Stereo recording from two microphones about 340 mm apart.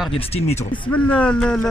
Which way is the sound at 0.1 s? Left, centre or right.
Centre.